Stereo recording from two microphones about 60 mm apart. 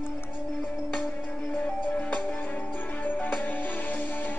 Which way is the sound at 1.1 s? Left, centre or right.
Left.